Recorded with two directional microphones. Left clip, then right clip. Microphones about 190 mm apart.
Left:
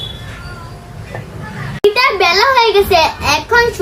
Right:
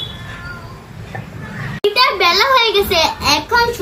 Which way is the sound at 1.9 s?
10° left (ahead or behind).